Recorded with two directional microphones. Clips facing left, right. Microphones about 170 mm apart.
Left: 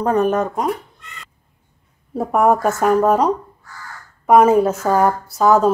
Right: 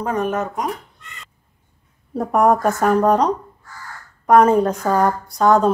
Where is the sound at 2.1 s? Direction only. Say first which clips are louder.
Even; 5° left (ahead or behind).